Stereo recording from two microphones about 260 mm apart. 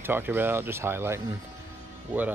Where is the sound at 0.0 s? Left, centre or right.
Centre.